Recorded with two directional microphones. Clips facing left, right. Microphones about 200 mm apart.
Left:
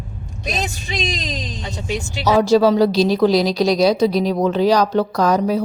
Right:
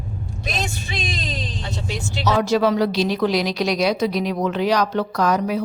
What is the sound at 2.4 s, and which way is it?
A woman's voice, 30° left (ahead or behind).